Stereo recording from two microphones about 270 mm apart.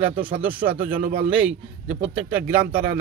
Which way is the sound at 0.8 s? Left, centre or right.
Right.